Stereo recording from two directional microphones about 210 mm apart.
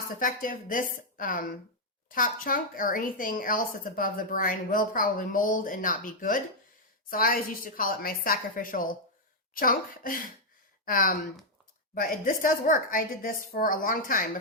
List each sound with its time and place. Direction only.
0.2 s a woman's voice: 40° left (ahead or behind)